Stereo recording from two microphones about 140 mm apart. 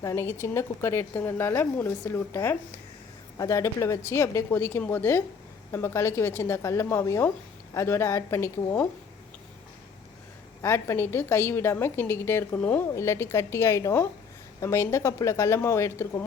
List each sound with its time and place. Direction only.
0.0 s a woman's voice: 20° left (ahead or behind)
10.6 s a woman's voice: 20° left (ahead or behind)